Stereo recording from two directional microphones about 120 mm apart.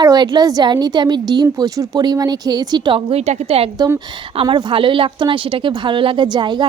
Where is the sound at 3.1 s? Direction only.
60° right (ahead or behind).